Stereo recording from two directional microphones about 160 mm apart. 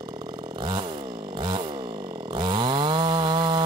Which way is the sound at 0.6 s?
30° right (ahead or behind).